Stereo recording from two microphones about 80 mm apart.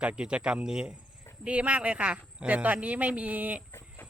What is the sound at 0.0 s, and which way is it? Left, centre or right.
Speech, centre.